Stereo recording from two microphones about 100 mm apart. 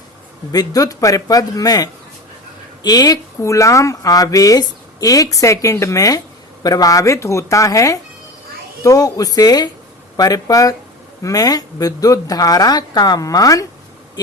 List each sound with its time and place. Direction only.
0.5 s speech: 40° left (ahead or behind)